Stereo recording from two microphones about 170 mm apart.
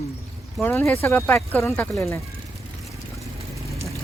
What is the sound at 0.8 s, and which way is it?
A man's voice, 15° left (ahead or behind).